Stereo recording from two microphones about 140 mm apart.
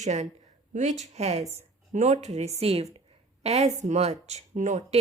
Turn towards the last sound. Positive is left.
turn(degrees=-55)  # may be behind; listen again after turning